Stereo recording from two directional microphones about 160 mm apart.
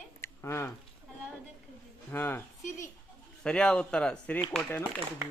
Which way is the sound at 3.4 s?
5° left (ahead or behind).